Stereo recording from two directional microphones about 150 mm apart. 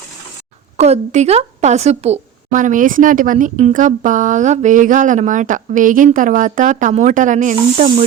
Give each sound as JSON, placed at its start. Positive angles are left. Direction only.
{"t": 0.8, "sound": "a woman's voice", "side_deg": -45}